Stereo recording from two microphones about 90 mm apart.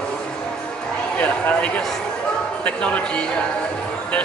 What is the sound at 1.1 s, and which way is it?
A man's voice, 15° left (ahead or behind).